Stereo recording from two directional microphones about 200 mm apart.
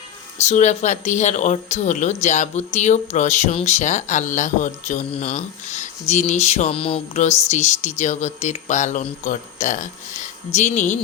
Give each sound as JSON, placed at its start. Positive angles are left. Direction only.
{"t": 0.3, "sound": "speech", "side_deg": 35}